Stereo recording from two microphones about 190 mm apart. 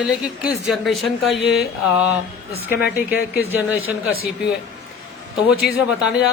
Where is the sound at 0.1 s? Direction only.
5° right (ahead or behind).